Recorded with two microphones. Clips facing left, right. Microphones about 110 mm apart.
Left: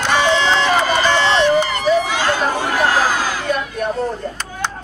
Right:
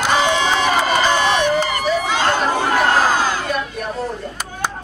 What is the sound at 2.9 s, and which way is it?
Crowd, 55° right (ahead or behind).